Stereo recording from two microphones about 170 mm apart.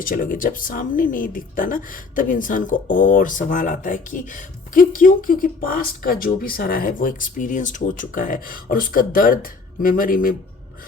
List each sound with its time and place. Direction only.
0.0 s a woman's voice: 55° left (ahead or behind)